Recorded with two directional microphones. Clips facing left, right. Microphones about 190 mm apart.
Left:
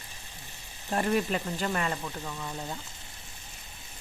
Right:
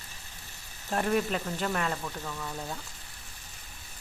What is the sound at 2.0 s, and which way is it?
Speech, 15° left (ahead or behind).